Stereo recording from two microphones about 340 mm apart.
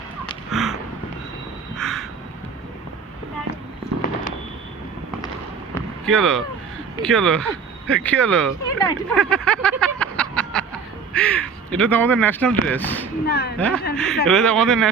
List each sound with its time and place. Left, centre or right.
0.5 s a sound: centre
1.7 s crow: centre
4.0 s fireworks: left
5.7 s a sound: centre
7.0 s speech: centre
13.2 s speech: left
13.6 s speech: centre